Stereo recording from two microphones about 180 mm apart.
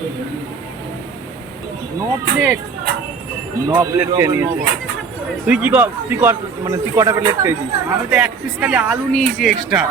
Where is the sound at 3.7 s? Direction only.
15° right (ahead or behind).